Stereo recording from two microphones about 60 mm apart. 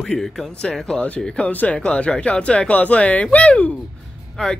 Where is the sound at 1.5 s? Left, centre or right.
Left.